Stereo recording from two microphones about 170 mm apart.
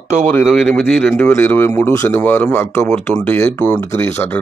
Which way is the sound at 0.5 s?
Centre (ahead or behind).